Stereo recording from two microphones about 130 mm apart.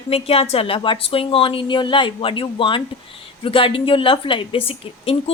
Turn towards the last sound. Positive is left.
turn(degrees=45)  # may be behind; listen again after turning